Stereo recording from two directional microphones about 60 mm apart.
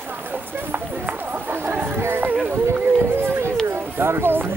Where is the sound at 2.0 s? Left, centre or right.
Right.